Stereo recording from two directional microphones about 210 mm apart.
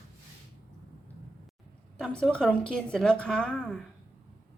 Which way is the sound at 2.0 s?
5° left (ahead or behind).